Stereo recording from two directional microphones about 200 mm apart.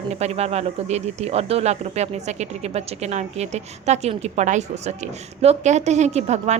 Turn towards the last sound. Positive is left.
turn(degrees=-35)  # may be behind; listen again after turning